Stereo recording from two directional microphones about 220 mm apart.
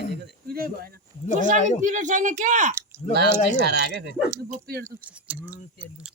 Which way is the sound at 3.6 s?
50° right (ahead or behind).